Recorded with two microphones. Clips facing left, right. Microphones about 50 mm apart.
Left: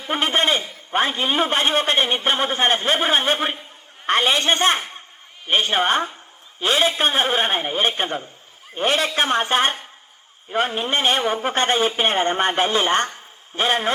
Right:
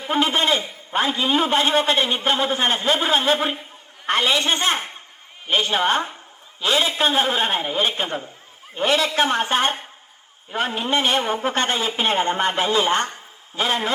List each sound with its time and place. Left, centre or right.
0.1 s a man's voice: left
10.8 s a man's voice: left